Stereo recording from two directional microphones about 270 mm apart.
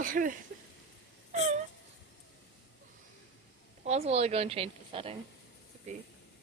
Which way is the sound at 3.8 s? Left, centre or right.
Right.